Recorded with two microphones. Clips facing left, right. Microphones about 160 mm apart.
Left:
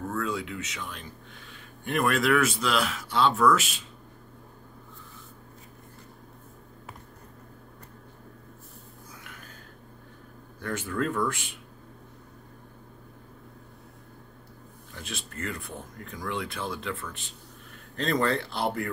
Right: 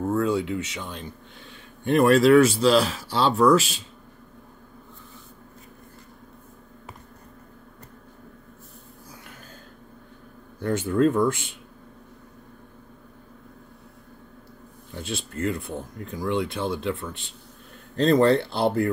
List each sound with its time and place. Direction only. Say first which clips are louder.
0.1 s speech: right 9 dB; 30° right (ahead or behind)
10.6 s speech: right 9 dB; 30° right (ahead or behind)
15.0 s speech: right 8 dB; 30° right (ahead or behind)